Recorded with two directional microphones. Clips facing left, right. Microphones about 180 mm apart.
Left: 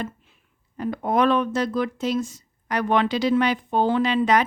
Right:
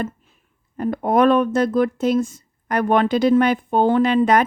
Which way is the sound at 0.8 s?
50° right (ahead or behind).